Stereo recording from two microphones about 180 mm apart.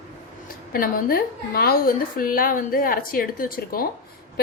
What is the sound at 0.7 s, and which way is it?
A woman's voice, 55° left (ahead or behind).